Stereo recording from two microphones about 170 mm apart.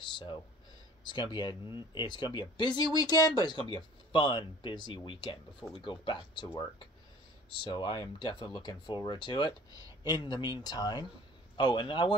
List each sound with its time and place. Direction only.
1.1 s speech: 30° left (ahead or behind)